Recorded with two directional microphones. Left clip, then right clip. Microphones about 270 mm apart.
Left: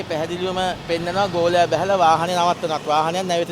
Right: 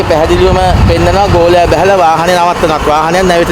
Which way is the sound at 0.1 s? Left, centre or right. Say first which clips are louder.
Right 16 dB; left.